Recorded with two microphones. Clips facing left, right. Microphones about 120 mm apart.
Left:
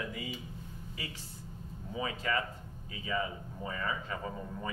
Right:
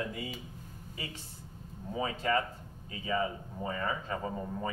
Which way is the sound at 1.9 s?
35° right (ahead or behind).